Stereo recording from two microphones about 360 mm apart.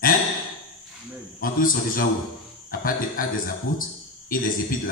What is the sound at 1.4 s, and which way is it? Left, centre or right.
A man's voice, left.